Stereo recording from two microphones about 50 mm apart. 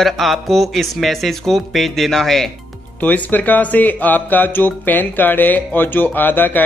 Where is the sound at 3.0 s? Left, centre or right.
Left.